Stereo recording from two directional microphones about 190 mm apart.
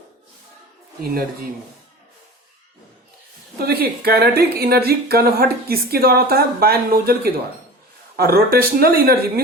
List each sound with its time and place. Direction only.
3.6 s a woman's voice: 55° right (ahead or behind)